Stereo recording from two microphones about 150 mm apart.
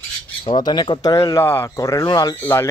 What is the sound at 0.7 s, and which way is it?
Speech, 30° left (ahead or behind).